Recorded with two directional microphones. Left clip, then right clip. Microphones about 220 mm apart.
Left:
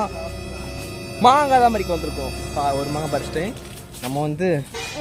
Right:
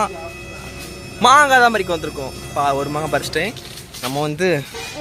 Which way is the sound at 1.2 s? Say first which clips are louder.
Right 3 dB; centre (ahead or behind).